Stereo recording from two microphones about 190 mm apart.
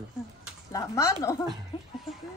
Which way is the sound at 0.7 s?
15° left (ahead or behind).